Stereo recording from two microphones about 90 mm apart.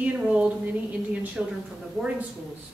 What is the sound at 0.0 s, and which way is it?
A woman's voice, 15° right (ahead or behind).